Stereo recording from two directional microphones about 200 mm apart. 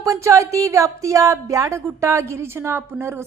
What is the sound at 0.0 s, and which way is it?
A woman's voice, 15° right (ahead or behind).